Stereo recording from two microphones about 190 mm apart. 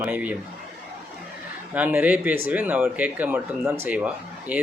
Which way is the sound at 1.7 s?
10° right (ahead or behind).